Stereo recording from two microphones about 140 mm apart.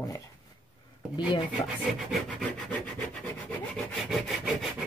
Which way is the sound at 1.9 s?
Centre (ahead or behind).